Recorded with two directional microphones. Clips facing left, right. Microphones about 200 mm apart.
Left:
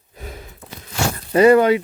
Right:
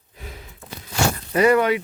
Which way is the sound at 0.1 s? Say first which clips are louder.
Left 4 dB; 45° left (ahead or behind).